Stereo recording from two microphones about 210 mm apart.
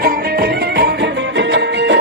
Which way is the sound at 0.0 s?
45° right (ahead or behind).